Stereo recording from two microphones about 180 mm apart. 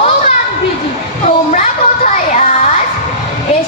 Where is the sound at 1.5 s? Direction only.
45° left (ahead or behind).